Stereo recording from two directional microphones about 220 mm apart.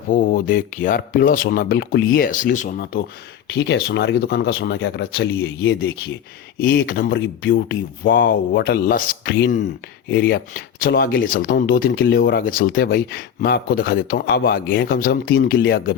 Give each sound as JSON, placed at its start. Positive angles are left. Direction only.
{"t": 0.1, "sound": "speech", "side_deg": 40}
{"t": 3.5, "sound": "speech", "side_deg": 50}